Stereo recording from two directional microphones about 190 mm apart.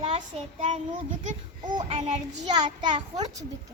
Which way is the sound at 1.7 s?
25° right (ahead or behind).